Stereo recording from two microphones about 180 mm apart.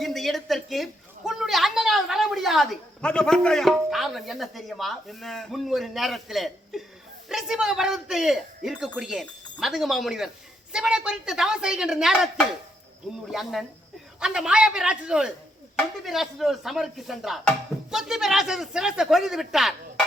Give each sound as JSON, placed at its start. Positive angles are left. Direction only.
{"t": 0.0, "sound": "a woman's voice", "side_deg": 0}